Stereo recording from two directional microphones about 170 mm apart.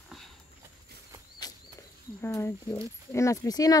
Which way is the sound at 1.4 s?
25° left (ahead or behind).